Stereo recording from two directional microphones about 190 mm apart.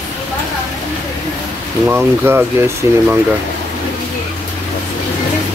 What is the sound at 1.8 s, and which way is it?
Speech, 10° right (ahead or behind).